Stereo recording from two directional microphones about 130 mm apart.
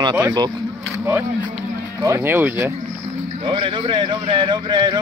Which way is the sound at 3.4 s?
40° right (ahead or behind).